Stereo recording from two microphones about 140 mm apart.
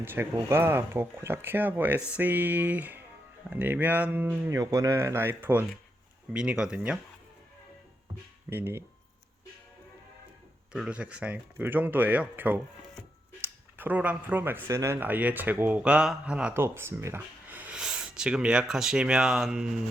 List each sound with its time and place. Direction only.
0.0 s speech: 15° right (ahead or behind)
4.5 s speech: 25° right (ahead or behind); by 7.0 s 5° right (ahead or behind)
8.4 s speech: 15° right (ahead or behind)
10.7 s speech: 5° right (ahead or behind)